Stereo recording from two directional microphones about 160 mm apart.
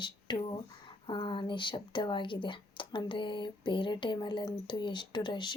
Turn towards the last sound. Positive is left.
turn(degrees=30)  # may be behind; listen again after turning